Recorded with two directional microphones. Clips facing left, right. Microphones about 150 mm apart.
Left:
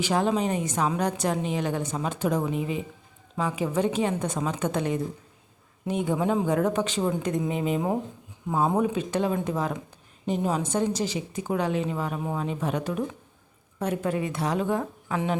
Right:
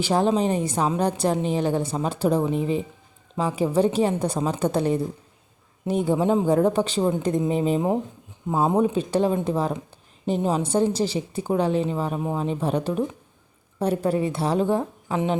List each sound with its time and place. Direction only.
0.0 s a woman's voice: 30° right (ahead or behind)